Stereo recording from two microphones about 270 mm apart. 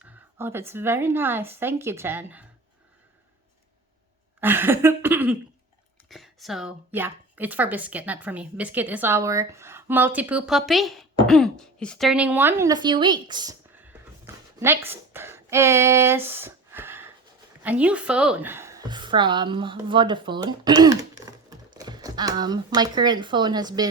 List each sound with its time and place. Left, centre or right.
0.0 s a woman's voice: centre
4.4 s a woman's voice: centre
14.3 s a sound: centre
14.6 s a woman's voice: centre